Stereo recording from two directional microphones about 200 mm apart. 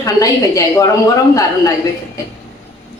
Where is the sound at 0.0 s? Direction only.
15° left (ahead or behind).